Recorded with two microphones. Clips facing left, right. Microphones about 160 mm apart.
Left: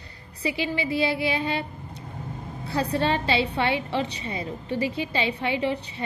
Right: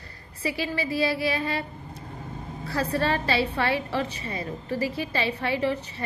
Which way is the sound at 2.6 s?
20° left (ahead or behind).